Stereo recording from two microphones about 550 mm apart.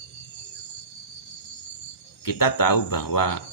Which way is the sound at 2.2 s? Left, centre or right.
Left.